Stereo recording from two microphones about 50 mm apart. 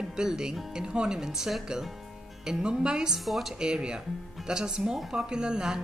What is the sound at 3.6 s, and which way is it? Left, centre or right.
A woman's voice, centre.